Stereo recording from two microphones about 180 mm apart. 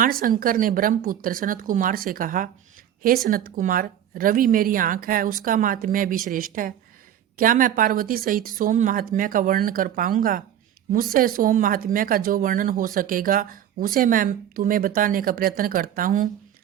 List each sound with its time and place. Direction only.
0.0 s speech: 50° right (ahead or behind)